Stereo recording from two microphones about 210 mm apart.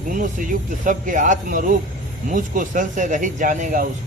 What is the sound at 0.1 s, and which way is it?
Speech, 40° right (ahead or behind).